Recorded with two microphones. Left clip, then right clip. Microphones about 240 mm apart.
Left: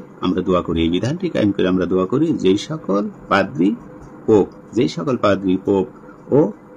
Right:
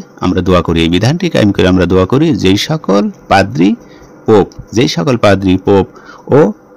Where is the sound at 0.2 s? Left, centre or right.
Right.